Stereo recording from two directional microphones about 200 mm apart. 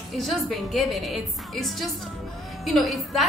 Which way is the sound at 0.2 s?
Centre (ahead or behind).